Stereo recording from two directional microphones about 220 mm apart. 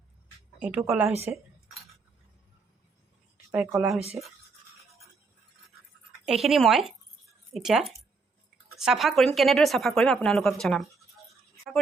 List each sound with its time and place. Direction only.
0.6 s a woman's voice: 5° right (ahead or behind)
3.5 s speech: 5° right (ahead or behind)
6.2 s speech: centre (ahead or behind)